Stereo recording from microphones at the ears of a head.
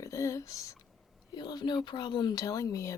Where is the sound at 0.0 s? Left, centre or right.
Left.